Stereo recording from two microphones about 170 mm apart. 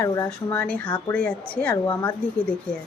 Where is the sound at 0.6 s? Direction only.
5° left (ahead or behind).